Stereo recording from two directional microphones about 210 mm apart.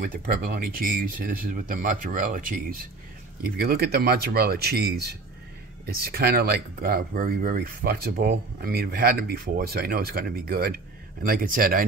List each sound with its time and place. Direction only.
0.0 s speech: 45° right (ahead or behind)